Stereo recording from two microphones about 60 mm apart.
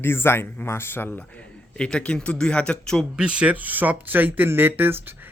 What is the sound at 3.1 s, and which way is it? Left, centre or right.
Speech, centre.